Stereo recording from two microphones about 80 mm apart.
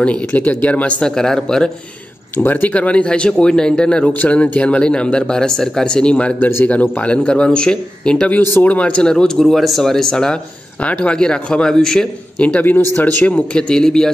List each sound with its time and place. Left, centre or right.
0.0 s speech: centre
2.3 s speech: left
8.4 s speech: left; by 14.1 s centre